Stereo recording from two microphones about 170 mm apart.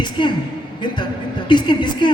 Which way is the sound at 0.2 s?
30° left (ahead or behind).